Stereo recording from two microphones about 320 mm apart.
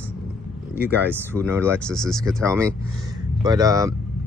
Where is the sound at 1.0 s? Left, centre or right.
Centre.